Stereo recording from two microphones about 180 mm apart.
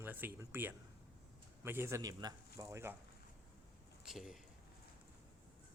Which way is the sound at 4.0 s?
Centre (ahead or behind).